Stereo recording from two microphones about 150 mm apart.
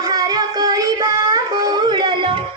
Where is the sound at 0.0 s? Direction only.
25° right (ahead or behind).